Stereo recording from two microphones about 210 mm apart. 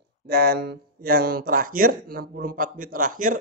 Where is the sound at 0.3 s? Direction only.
50° right (ahead or behind).